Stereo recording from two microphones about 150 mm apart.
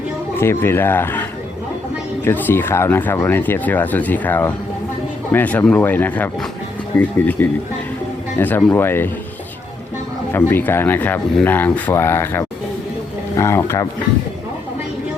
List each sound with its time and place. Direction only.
0.3 s speech: 15° left (ahead or behind)
10.3 s speech: 15° left (ahead or behind)